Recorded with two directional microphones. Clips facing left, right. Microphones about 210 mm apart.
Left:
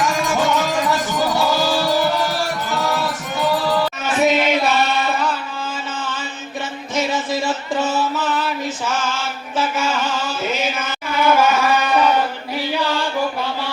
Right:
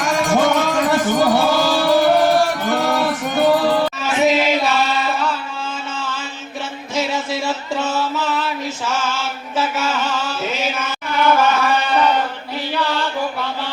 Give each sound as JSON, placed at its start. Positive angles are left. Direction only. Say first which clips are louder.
{"t": 0.0, "sound": "music", "louder": "right 3 dB", "side_deg": -55}
{"t": 4.3, "sound": "chant", "louder": "even", "side_deg": 0}
{"t": 6.9, "sound": "music", "louder": "left 1 dB", "side_deg": 0}
{"t": 8.9, "sound": "chant", "louder": "right 1 dB", "side_deg": 0}
{"t": 11.2, "sound": "a sound", "louder": "even", "side_deg": 10}